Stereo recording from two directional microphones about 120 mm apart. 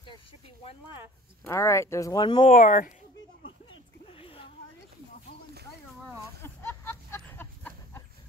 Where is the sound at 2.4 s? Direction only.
90° left.